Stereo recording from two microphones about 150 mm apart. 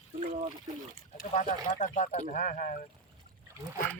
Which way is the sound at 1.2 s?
60° left (ahead or behind).